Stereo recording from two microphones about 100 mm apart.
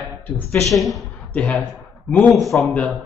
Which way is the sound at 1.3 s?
10° left (ahead or behind).